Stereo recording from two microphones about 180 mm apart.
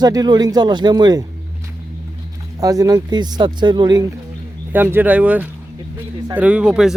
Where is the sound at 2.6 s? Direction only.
20° right (ahead or behind).